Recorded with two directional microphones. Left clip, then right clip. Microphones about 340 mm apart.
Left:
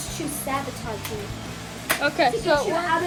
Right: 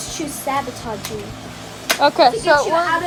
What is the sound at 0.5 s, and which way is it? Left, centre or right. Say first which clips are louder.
Speech: right 7 dB; right.